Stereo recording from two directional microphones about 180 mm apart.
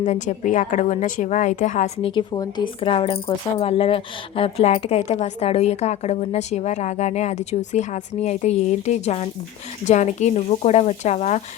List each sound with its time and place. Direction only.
0.0 s a woman's voice: 40° left (ahead or behind)
2.0 s speech: 30° left (ahead or behind)